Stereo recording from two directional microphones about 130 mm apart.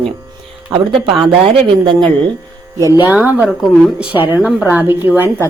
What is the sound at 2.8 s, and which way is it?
A woman's voice, 15° right (ahead or behind).